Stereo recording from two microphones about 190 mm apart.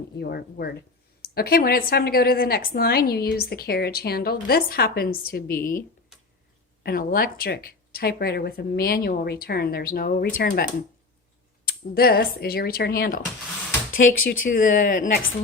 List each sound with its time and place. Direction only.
0.2 s a woman's voice: 55° left (ahead or behind)
6.8 s a woman's voice: 50° left (ahead or behind)